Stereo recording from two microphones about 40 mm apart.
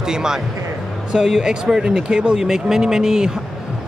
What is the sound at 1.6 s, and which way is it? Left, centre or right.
A man's voice, centre.